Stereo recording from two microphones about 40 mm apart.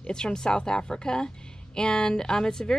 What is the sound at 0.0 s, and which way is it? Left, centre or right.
A woman's voice, centre.